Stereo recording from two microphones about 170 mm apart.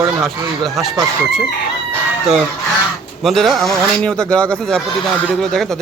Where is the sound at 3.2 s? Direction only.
Centre (ahead or behind).